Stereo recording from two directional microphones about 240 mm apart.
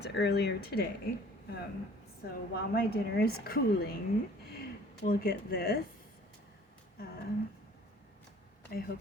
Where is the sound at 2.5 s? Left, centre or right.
Left.